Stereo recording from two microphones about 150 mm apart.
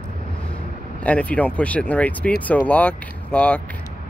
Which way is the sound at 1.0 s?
10° left (ahead or behind).